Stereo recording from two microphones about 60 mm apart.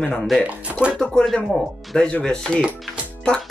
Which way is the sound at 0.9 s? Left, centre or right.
Centre.